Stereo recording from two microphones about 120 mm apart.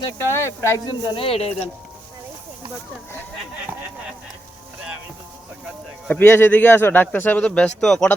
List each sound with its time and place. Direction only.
0.2 s speech: 20° left (ahead or behind)
1.0 s speech: 50° left (ahead or behind)
6.1 s a man's voice: 15° left (ahead or behind)